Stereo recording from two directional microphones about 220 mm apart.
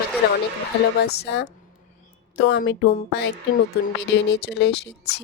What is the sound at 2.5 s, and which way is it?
Speech, 55° left (ahead or behind).